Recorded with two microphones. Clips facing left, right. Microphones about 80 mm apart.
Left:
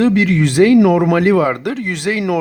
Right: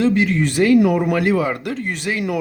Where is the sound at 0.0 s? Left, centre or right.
Left.